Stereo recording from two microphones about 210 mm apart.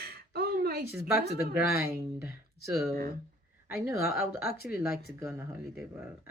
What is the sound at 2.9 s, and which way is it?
Speech, 45° right (ahead or behind).